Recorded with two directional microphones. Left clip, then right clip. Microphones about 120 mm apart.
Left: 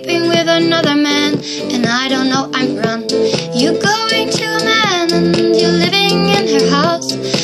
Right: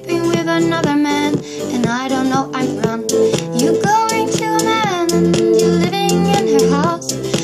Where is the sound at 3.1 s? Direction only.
40° right (ahead or behind).